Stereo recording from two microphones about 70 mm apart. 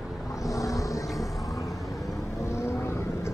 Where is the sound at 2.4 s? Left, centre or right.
Left.